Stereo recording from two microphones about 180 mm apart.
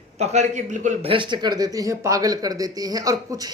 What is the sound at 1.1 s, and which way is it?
Speech, 25° right (ahead or behind).